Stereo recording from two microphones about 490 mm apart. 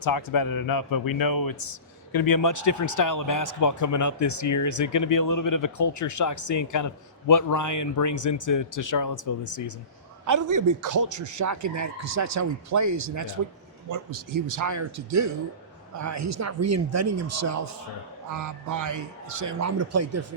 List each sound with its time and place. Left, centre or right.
0.0 s speech: left
10.2 s a man's voice: right